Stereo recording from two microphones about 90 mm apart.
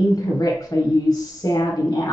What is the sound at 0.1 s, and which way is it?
A woman's voice, 45° left (ahead or behind).